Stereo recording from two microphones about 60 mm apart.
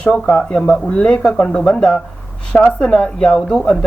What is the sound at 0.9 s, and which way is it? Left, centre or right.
Speech, centre.